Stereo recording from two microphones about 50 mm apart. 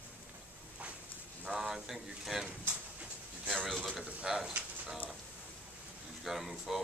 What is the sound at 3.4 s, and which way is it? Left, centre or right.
Speech, centre.